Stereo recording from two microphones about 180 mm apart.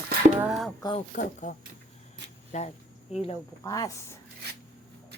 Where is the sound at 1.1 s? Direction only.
45° left (ahead or behind).